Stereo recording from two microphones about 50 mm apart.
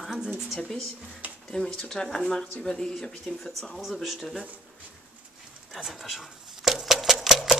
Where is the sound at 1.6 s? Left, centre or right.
Left.